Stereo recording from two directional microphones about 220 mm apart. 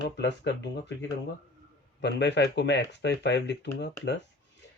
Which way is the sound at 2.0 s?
50° left (ahead or behind).